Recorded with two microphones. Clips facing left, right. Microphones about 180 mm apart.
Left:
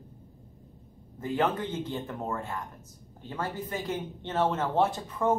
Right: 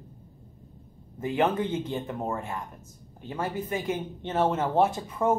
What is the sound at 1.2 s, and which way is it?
Speech, 15° right (ahead or behind).